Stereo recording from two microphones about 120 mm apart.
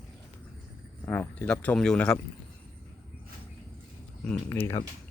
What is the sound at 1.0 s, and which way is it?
Speech, 20° left (ahead or behind).